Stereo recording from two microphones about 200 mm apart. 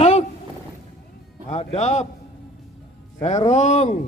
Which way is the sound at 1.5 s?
30° left (ahead or behind).